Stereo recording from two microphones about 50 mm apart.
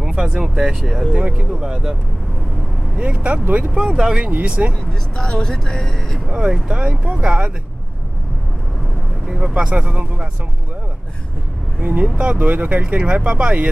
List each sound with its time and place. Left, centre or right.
0.0 s speech: centre
3.0 s speech: right
3.7 s speech: centre
4.3 s speech: right
4.7 s speech: centre
6.2 s speech: centre
9.5 s speech: right
11.8 s speech: right